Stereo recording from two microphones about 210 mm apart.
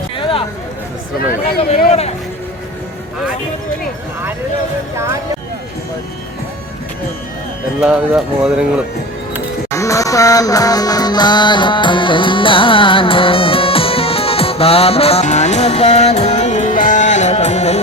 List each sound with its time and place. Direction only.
0.2 s a sound: 25° left (ahead or behind)
1.3 s speech: 35° left (ahead or behind)
7.8 s speech: 5° right (ahead or behind)
9.7 s music: 15° left (ahead or behind); by 17.7 s 30° left (ahead or behind)